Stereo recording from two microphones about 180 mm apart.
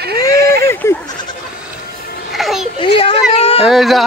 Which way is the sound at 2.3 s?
Centre (ahead or behind).